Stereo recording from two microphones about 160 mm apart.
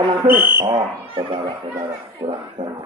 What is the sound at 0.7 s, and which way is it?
Speech, 35° right (ahead or behind).